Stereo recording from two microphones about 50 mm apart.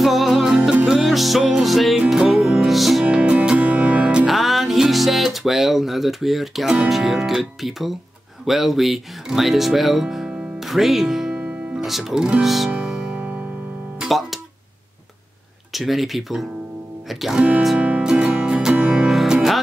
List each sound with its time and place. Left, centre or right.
0.0 s music: centre
3.0 s music: right
3.8 s music: centre
4.3 s music: centre
6.9 s speech: centre
11.3 s music: right
11.8 s speech: centre
12.4 s music: centre
13.1 s music: right
13.9 s guitar: centre
15.7 s speech: centre
17.7 s music: right
18.9 s music: centre